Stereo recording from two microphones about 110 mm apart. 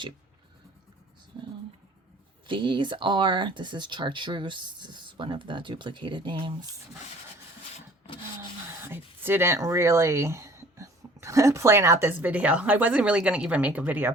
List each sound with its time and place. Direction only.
2.5 s speech: 45° right (ahead or behind)
8.8 s speech: 20° right (ahead or behind)